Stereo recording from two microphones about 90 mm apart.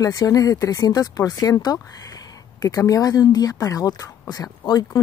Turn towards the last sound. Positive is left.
turn(degrees=45)  # may be behind; listen again after turning